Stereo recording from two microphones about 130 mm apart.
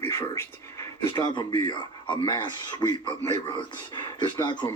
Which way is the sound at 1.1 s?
35° left (ahead or behind).